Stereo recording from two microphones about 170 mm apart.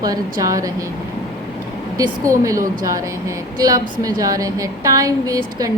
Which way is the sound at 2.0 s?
20° right (ahead or behind).